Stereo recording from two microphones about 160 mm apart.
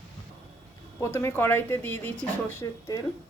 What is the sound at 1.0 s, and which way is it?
Speech, 15° left (ahead or behind).